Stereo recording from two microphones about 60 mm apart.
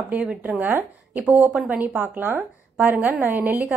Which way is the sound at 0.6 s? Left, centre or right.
Right.